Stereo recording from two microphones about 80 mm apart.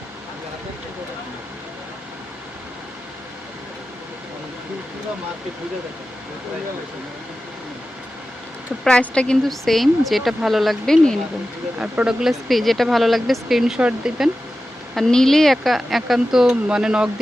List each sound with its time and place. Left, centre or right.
8.8 s speech: centre
11.8 s speech: centre
14.9 s speech: centre